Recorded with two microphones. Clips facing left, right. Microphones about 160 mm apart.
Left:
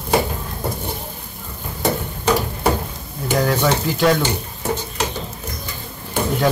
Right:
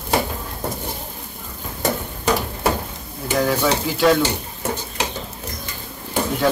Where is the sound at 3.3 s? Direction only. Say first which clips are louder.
Left 1 dB; centre (ahead or behind).